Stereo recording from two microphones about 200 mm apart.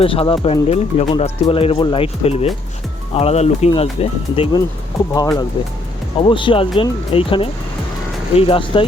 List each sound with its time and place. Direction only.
0.0 s speech: 30° left (ahead or behind)